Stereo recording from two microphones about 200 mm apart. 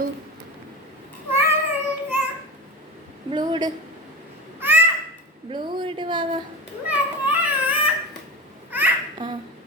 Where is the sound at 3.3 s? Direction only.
20° right (ahead or behind).